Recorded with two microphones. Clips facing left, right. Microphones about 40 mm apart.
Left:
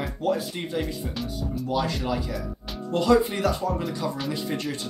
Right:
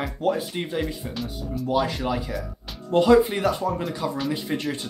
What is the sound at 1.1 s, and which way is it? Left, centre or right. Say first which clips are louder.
Speech: even; centre.